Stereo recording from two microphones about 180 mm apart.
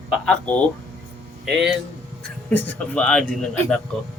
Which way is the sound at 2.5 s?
10° left (ahead or behind).